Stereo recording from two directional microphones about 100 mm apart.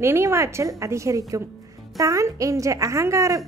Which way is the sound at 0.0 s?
25° right (ahead or behind).